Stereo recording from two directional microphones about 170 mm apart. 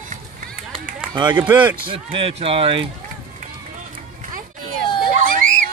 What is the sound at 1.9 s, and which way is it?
Speech, 30° right (ahead or behind).